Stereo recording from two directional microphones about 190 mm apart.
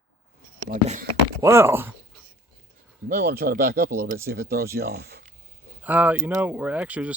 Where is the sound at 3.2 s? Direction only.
55° right (ahead or behind).